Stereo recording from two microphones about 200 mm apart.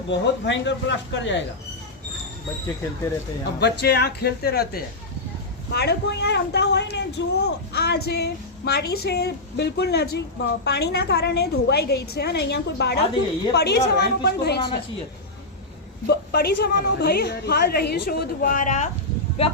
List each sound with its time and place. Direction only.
0.1 s speech: 60° left (ahead or behind)
3.6 s a woman's voice: 55° left (ahead or behind)
16.0 s a woman's voice: 50° left (ahead or behind)
19.4 s speech: 30° left (ahead or behind)